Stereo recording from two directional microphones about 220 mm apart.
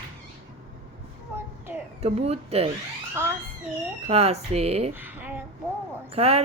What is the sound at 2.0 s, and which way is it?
Speech, 30° right (ahead or behind).